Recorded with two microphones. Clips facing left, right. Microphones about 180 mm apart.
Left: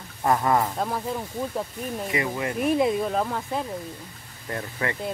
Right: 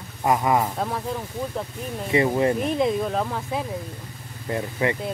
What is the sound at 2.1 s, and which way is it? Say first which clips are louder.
Speech: right 10 dB; 30° right (ahead or behind).